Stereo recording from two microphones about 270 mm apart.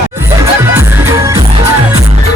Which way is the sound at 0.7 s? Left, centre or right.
Centre.